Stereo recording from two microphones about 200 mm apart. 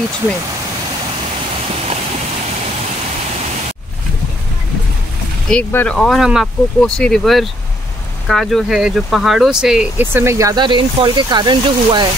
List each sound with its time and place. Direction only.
5.5 s speech: 10° left (ahead or behind); by 12.1 s 20° right (ahead or behind)